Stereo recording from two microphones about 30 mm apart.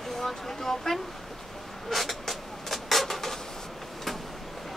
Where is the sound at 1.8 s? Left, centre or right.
Centre.